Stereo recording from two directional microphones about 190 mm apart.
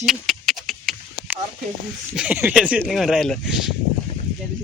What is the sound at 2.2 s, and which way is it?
A man's voice, 5° right (ahead or behind).